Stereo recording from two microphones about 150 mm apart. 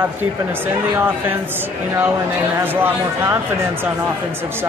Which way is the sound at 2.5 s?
20° right (ahead or behind).